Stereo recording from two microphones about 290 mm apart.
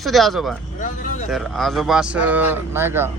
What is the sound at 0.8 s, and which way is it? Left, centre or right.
Speech, left.